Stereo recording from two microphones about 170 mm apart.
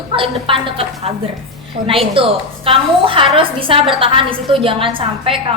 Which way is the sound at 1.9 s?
30° right (ahead or behind).